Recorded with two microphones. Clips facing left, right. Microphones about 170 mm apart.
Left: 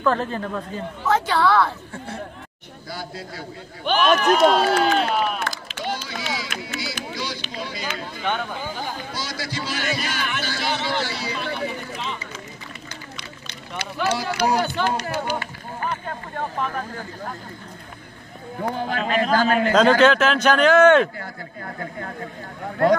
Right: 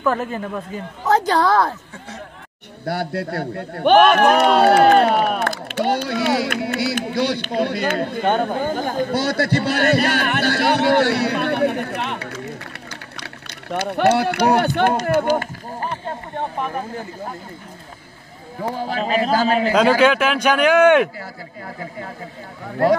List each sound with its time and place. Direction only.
0.0 s speech: 10° right (ahead or behind)
1.0 s a woman's voice: 40° right (ahead or behind)
2.8 s a man's voice: 65° right (ahead or behind)
13.2 s vehicle: 60° right (ahead or behind)
14.4 s a man's voice: 60° right (ahead or behind)
15.8 s a sound: 30° right (ahead or behind)
16.5 s speech: 15° right (ahead or behind)
18.6 s a man's voice: 5° right (ahead or behind)